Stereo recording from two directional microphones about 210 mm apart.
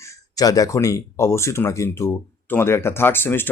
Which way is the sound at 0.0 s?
15° left (ahead or behind).